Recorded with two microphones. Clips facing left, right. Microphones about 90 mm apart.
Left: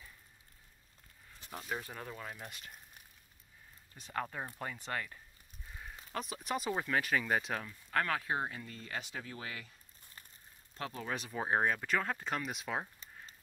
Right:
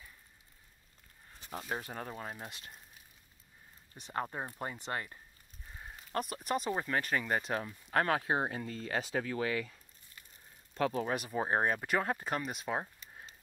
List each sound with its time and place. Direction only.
1.5 s speech: 30° right (ahead or behind)
1.8 s speech: 45° right (ahead or behind)
4.1 s speech: 25° right (ahead or behind)
6.4 s speech: centre (ahead or behind)
7.6 s speech: 25° right (ahead or behind)
8.5 s speech: 50° right (ahead or behind); by 9.8 s 70° right (ahead or behind)
10.9 s speech: 35° right (ahead or behind)
11.3 s speech: 5° right (ahead or behind)
11.6 s speech: 20° right (ahead or behind)